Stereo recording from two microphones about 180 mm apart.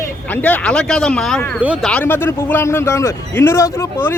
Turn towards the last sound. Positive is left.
turn(degrees=15)  # may be behind; listen again after turning